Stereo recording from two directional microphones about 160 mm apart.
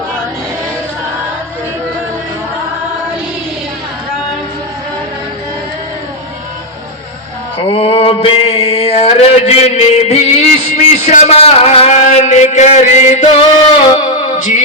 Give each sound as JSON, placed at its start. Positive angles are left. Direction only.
{"t": 7.6, "sound": "a sound", "side_deg": 35}
{"t": 10.8, "sound": "a man's voice", "side_deg": 45}
{"t": 13.9, "sound": "music", "side_deg": 50}